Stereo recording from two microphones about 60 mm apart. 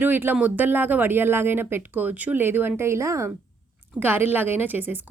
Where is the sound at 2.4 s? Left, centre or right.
Right.